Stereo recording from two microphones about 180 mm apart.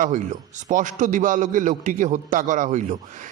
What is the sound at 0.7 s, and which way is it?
Speech, 45° right (ahead or behind).